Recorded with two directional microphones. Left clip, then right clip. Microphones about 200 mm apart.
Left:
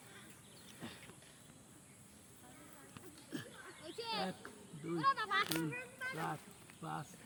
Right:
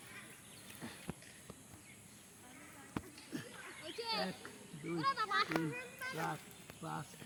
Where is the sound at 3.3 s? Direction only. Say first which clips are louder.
Right 1 dB; 30° left (ahead or behind).